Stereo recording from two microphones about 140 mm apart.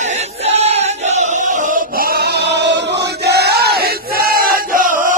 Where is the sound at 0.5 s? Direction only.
50° right (ahead or behind).